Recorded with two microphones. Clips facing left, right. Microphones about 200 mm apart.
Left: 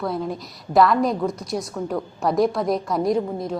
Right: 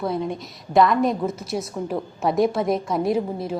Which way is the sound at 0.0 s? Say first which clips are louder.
Right 1 dB; centre (ahead or behind).